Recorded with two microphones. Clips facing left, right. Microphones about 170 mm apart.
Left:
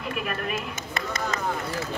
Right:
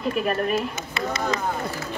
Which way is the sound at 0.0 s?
35° right (ahead or behind).